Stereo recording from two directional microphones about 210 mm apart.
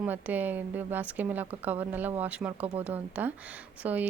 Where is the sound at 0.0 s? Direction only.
10° right (ahead or behind).